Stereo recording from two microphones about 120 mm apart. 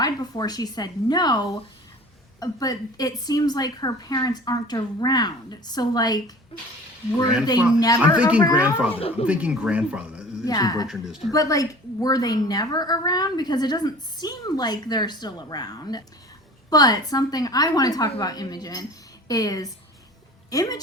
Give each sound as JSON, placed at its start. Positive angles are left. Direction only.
{"t": 0.0, "sound": "a woman's voice", "side_deg": 35}
{"t": 8.0, "sound": "speech", "side_deg": -10}
{"t": 8.9, "sound": "speech", "side_deg": 50}
{"t": 9.2, "sound": "speech", "side_deg": -10}
{"t": 10.4, "sound": "a woman's voice", "side_deg": 30}
{"t": 10.8, "sound": "a woman's voice", "side_deg": -5}
{"t": 11.3, "sound": "a woman's voice", "side_deg": 30}